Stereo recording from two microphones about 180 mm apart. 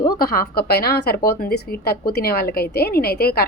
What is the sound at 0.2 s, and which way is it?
A woman's voice, 55° left (ahead or behind).